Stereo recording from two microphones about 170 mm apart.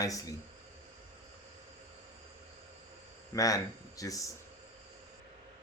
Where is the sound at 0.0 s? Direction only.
20° left (ahead or behind).